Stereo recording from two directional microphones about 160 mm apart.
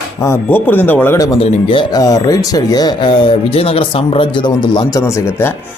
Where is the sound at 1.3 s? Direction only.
35° left (ahead or behind).